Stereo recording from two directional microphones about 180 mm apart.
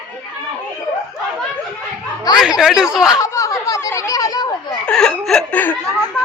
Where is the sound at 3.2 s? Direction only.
15° left (ahead or behind).